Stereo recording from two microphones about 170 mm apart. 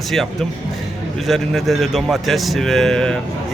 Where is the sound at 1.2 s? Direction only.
Centre (ahead or behind).